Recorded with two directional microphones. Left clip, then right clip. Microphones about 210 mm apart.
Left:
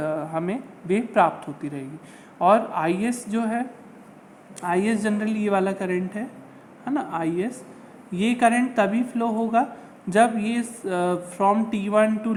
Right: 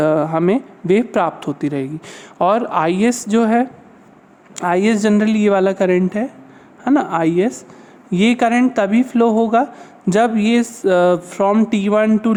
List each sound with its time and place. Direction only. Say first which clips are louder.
0.0 s speech: right 11 dB; 50° right (ahead or behind)